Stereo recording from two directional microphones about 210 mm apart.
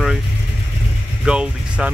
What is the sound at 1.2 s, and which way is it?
Speech, 5° right (ahead or behind).